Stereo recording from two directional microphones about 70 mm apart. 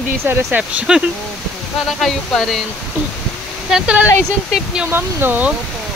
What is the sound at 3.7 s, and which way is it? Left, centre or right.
Speech, centre.